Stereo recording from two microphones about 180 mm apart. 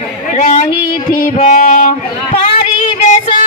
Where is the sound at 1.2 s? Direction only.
45° left (ahead or behind).